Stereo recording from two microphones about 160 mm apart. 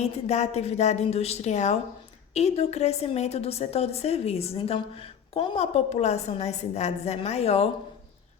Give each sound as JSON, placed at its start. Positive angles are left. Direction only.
{"t": 0.0, "sound": "a woman's voice", "side_deg": 45}